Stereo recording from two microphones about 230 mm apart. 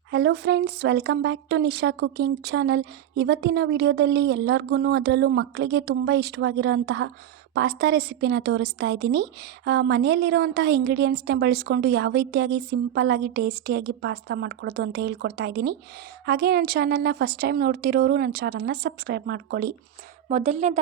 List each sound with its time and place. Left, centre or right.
0.1 s speech: right
20.2 s a woman's voice: right